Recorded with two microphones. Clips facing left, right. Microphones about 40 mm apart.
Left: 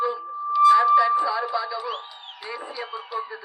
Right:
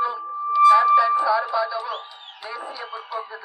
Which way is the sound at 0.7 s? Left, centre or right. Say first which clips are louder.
Right 1 dB; centre.